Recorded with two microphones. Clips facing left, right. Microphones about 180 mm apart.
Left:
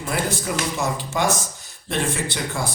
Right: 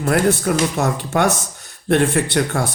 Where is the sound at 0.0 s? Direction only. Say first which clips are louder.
Right 9 dB; 65° right (ahead or behind).